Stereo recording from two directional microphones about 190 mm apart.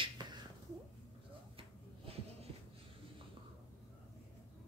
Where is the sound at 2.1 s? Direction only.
30° right (ahead or behind).